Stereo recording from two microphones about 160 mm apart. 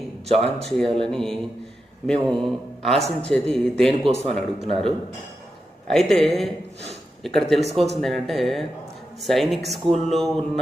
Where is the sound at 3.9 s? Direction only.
40° right (ahead or behind).